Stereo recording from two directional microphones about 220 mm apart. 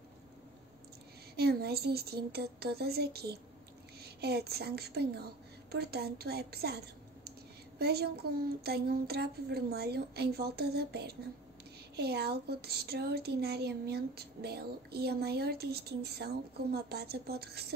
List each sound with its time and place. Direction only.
1.3 s a woman's voice: 45° right (ahead or behind)
7.8 s speech: 45° right (ahead or behind)